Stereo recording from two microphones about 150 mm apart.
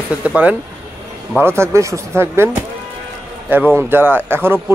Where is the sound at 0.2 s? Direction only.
10° right (ahead or behind).